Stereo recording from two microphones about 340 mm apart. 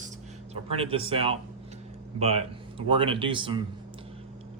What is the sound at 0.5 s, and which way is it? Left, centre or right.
Speech, centre.